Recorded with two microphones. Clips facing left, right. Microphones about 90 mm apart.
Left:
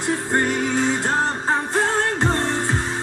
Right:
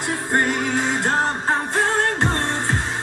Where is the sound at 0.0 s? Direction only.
20° right (ahead or behind).